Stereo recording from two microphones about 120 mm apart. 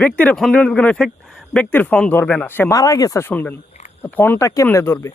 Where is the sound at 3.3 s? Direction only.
15° left (ahead or behind).